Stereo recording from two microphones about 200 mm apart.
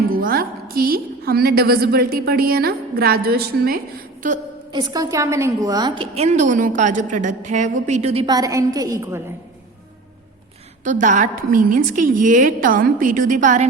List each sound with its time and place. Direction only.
0.1 s a woman's voice: 45° right (ahead or behind)
4.7 s a woman's voice: 20° right (ahead or behind)
10.8 s a woman's voice: 40° right (ahead or behind)